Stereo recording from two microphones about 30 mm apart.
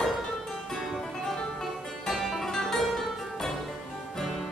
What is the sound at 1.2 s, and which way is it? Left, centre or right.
Music, centre.